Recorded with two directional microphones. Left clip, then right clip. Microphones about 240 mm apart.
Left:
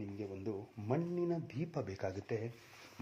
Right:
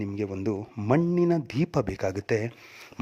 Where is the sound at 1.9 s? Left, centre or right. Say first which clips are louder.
Right 12 dB; right.